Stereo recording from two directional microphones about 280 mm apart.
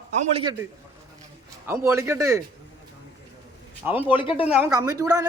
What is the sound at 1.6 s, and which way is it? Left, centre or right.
Speech, centre.